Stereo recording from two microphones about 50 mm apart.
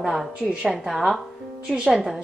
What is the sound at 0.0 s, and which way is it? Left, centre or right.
A woman's voice, centre.